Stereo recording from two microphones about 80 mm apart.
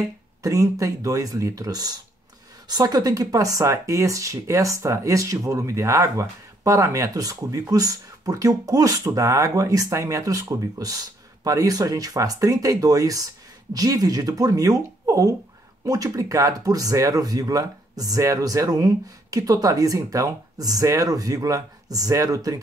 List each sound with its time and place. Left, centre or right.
0.4 s speech: right